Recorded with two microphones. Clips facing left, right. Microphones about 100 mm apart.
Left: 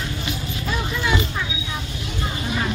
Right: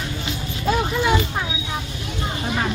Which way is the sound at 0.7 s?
55° right (ahead or behind).